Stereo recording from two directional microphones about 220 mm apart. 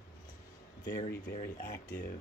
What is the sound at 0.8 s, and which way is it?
Speech, 35° left (ahead or behind).